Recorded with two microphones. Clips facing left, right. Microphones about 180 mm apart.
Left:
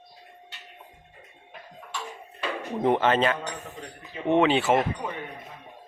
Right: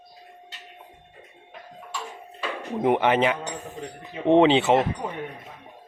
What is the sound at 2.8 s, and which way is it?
Speech, 15° right (ahead or behind).